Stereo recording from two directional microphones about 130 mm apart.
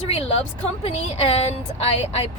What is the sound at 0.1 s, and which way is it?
A woman's voice, 50° left (ahead or behind).